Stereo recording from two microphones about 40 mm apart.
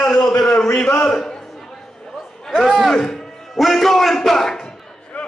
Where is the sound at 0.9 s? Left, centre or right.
Left.